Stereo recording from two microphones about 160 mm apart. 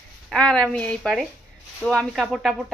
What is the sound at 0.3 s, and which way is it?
Speech, 5° left (ahead or behind).